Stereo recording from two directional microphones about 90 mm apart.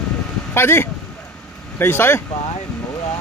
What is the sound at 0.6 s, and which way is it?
Speech, 25° left (ahead or behind).